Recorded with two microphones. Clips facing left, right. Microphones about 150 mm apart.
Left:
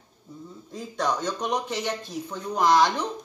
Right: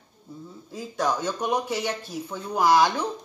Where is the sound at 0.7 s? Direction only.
5° right (ahead or behind).